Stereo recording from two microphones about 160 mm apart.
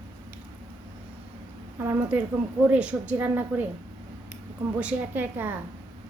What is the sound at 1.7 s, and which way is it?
A woman's voice, 15° right (ahead or behind).